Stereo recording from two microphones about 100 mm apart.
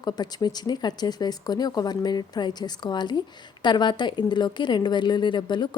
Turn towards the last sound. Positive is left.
turn(degrees=50)  # may be behind; listen again after turning